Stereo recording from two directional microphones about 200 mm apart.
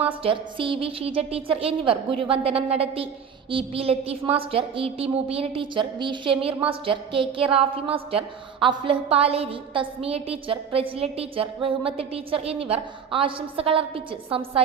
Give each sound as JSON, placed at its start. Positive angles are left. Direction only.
{"t": 0.0, "sound": "a woman's voice", "side_deg": -25}